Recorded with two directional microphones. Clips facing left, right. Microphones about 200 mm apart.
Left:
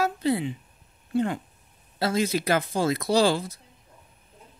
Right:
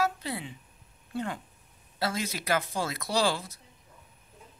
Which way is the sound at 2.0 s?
25° left (ahead or behind).